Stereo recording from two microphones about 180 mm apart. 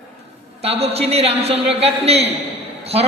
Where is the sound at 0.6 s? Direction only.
35° right (ahead or behind).